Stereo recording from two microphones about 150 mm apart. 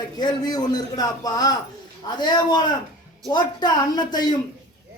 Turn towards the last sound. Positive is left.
turn(degrees=30)  # may be behind; listen again after turning